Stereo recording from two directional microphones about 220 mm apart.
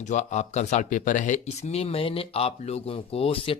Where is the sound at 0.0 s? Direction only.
35° left (ahead or behind).